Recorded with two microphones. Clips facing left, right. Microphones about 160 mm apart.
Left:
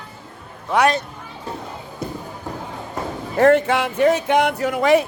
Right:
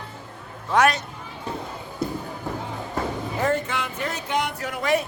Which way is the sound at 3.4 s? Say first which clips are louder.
Left 11 dB; 75° left (ahead or behind).